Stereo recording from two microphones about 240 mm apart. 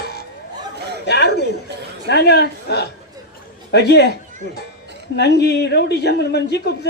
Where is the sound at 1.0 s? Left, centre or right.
Left.